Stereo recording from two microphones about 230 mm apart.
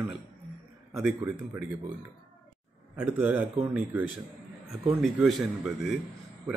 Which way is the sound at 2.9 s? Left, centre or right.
Centre.